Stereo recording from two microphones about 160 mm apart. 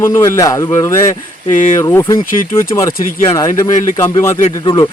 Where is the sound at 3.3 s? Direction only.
20° left (ahead or behind).